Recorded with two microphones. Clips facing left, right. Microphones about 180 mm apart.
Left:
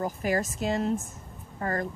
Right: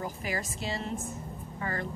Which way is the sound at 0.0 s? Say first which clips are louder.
Left 7 dB; 45° left (ahead or behind).